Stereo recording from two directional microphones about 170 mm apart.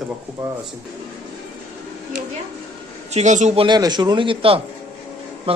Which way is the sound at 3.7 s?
25° right (ahead or behind).